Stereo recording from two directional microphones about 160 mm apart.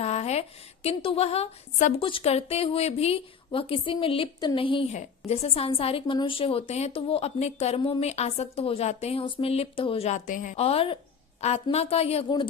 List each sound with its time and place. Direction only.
0.0 s a woman's voice: 40° left (ahead or behind)
10.6 s a woman's voice: 35° left (ahead or behind)